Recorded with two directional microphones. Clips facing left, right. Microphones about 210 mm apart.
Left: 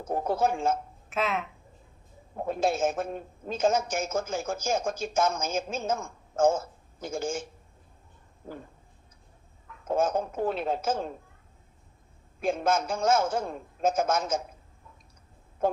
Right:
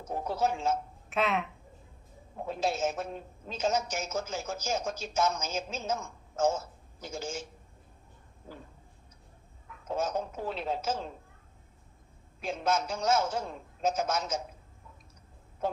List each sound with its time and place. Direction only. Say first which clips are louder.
0.0 s a woman's voice: left 4 dB; 50° left (ahead or behind)
1.1 s speech: even; centre (ahead or behind)
2.3 s a woman's voice: left 4 dB; 50° left (ahead or behind)
8.4 s a woman's voice: left 6 dB; 50° left (ahead or behind)
9.8 s a woman's voice: left 5 dB; 50° left (ahead or behind)
12.4 s a woman's voice: left 4 dB; 50° left (ahead or behind)
15.6 s a woman's voice: left 6 dB; 50° left (ahead or behind)